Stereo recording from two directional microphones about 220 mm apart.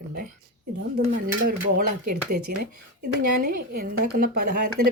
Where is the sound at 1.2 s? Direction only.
40° right (ahead or behind).